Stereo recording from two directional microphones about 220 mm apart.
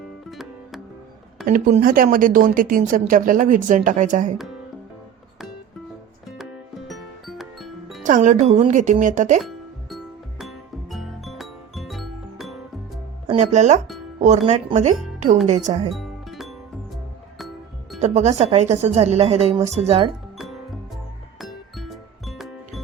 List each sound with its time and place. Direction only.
0.3 s music: centre (ahead or behind)
1.5 s speech: 40° right (ahead or behind)
6.2 s music: centre (ahead or behind)
8.0 s speech: 35° right (ahead or behind)
9.4 s music: centre (ahead or behind)
13.2 s a woman's voice: 30° right (ahead or behind)
15.9 s music: centre (ahead or behind)
18.0 s a woman's voice: 30° right (ahead or behind)
21.3 s music: centre (ahead or behind)